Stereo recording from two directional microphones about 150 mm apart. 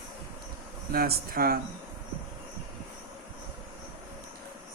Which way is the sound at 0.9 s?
80° right.